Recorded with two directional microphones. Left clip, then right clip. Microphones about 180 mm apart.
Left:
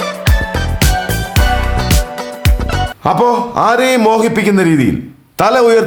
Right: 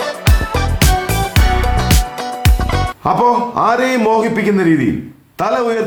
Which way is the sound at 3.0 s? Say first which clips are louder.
Left 1 dB; 20° left (ahead or behind).